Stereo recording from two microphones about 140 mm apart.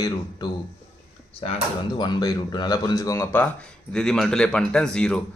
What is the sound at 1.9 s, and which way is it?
Speech, 30° left (ahead or behind).